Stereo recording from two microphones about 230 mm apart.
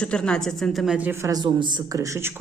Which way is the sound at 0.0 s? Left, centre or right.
Centre.